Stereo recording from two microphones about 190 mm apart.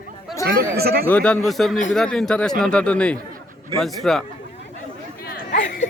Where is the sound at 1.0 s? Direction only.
5° left (ahead or behind).